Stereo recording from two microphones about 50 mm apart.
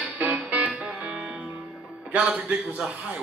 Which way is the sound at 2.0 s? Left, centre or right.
Right.